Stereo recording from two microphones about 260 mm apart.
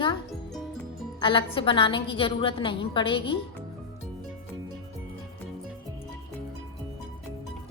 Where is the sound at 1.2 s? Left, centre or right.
Centre.